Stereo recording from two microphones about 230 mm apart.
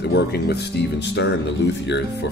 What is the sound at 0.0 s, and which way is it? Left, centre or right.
Speech, left.